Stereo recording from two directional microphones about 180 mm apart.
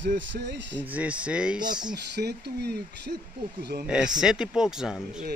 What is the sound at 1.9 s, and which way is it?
Speech, 65° right (ahead or behind).